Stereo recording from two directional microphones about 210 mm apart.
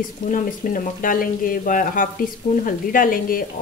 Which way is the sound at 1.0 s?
40° left (ahead or behind).